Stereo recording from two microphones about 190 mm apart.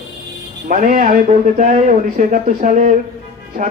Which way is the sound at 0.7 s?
45° right (ahead or behind).